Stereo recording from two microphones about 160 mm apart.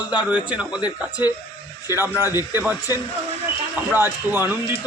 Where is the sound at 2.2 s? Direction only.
20° left (ahead or behind).